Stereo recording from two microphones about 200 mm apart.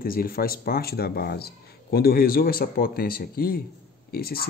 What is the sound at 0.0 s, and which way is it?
Speech, 45° left (ahead or behind).